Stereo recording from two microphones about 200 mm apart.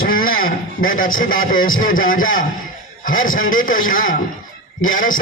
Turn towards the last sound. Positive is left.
turn(degrees=40)  # may be behind; listen again after turning